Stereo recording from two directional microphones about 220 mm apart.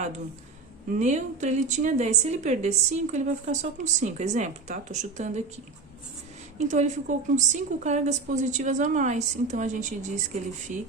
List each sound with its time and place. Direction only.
0.9 s a woman's voice: 35° right (ahead or behind)
6.6 s a woman's voice: 30° right (ahead or behind)